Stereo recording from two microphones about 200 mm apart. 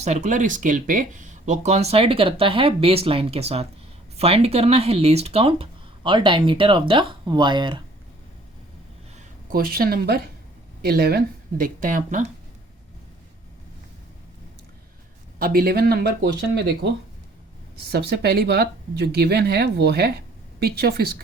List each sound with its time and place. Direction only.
0.0 s speech: 35° right (ahead or behind)
9.5 s speech: 45° right (ahead or behind)
15.4 s speech: 45° right (ahead or behind)